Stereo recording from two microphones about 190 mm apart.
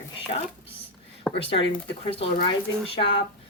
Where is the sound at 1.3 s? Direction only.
15° left (ahead or behind).